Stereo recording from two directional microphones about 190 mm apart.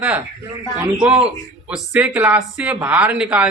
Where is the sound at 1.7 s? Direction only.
5° right (ahead or behind).